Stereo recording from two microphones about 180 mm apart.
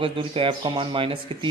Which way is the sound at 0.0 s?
30° right (ahead or behind).